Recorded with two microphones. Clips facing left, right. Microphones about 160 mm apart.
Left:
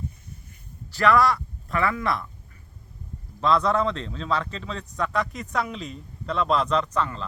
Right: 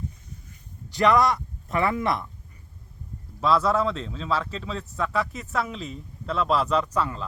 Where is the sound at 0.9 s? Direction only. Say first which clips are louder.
Even; 20° right (ahead or behind).